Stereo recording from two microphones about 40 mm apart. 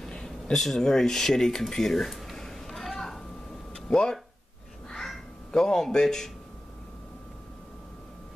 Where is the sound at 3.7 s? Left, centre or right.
Left.